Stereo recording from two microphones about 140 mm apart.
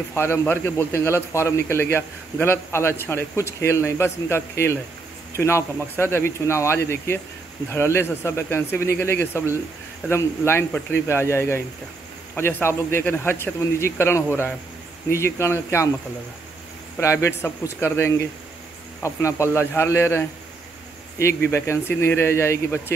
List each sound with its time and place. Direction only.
0.1 s a man's voice: 15° left (ahead or behind)
17.0 s a man's voice: 20° left (ahead or behind)